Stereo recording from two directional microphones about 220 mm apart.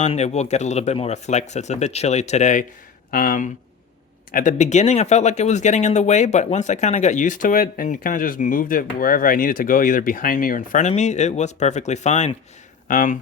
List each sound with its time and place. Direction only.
0.0 s speech: 30° left (ahead or behind)